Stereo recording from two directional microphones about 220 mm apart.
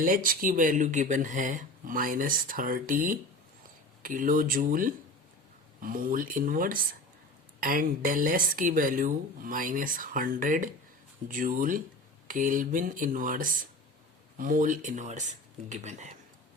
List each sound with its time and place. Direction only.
0.0 s speech: 40° right (ahead or behind)